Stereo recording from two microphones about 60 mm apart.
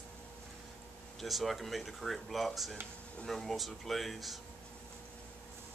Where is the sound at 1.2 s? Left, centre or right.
Centre.